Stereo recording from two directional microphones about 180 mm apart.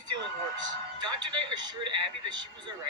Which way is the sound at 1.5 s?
25° right (ahead or behind).